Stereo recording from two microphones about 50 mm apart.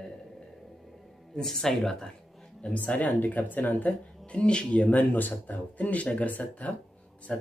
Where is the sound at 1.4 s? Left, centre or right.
Centre.